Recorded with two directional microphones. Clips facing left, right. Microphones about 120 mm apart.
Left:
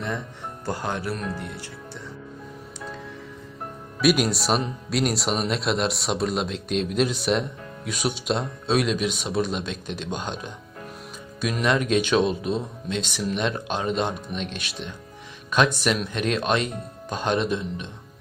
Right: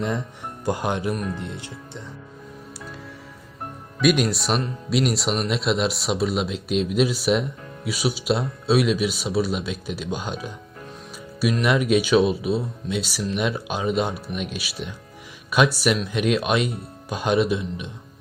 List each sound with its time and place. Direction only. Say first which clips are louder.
0.6 s speech: right 4 dB; 15° right (ahead or behind)
4.0 s speech: right 1 dB; centre (ahead or behind)